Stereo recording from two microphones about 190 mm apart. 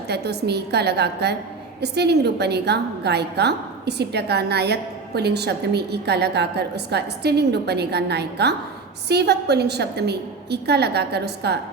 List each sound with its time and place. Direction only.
0.1 s a woman's voice: 60° right (ahead or behind)